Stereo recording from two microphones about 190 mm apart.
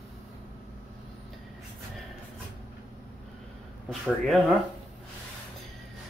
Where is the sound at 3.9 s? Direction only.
Centre (ahead or behind).